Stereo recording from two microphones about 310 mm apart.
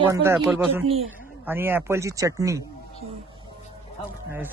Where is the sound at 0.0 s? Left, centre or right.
Centre.